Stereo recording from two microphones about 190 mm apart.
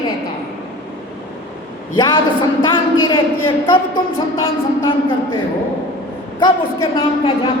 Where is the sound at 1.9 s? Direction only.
25° left (ahead or behind).